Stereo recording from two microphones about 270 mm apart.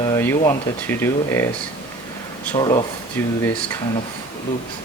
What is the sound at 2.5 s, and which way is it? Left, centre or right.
Speech, centre.